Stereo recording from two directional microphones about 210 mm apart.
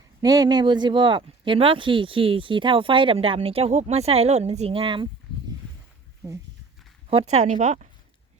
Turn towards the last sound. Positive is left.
turn(degrees=-35)  # may be behind; listen again after turning